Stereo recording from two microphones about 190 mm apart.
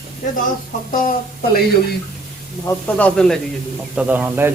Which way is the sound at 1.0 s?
50° left (ahead or behind).